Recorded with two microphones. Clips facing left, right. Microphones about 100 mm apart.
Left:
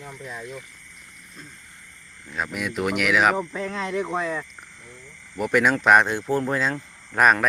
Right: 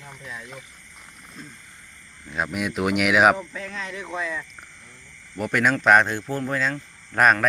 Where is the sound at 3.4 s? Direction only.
35° left (ahead or behind).